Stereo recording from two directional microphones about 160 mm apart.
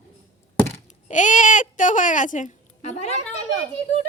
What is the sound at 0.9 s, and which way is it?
Speech, 50° left (ahead or behind).